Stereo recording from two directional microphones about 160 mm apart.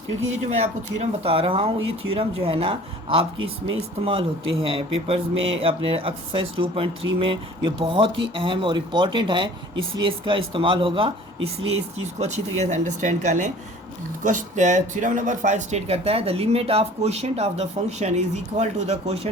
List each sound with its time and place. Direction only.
0.9 s speech: 35° right (ahead or behind)
12.2 s speech: 45° right (ahead or behind)